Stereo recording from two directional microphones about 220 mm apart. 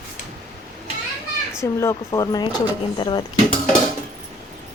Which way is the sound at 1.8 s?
15° left (ahead or behind).